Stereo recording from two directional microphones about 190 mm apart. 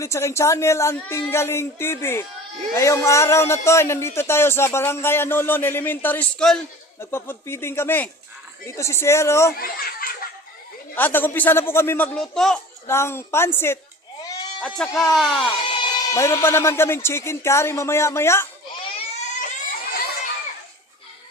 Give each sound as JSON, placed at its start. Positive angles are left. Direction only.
{"t": 0.0, "sound": "a man's voice", "side_deg": 15}
{"t": 9.6, "sound": "speech", "side_deg": 50}
{"t": 10.9, "sound": "a man's voice", "side_deg": 10}
{"t": 12.9, "sound": "a man's voice", "side_deg": 15}
{"t": 14.8, "sound": "speech", "side_deg": 5}
{"t": 15.6, "sound": "a man's voice", "side_deg": 25}
{"t": 18.9, "sound": "baby cry", "side_deg": 40}